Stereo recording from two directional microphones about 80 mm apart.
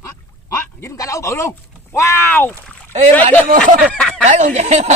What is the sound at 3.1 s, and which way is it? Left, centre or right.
Speech, centre.